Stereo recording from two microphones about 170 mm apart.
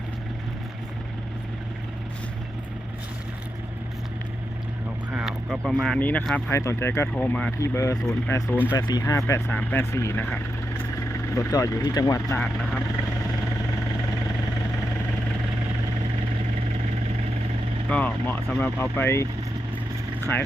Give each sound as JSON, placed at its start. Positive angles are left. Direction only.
{"t": 5.1, "sound": "speech", "side_deg": 0}
{"t": 11.3, "sound": "speech", "side_deg": 20}
{"t": 17.8, "sound": "speech", "side_deg": 10}
{"t": 20.3, "sound": "speech", "side_deg": 10}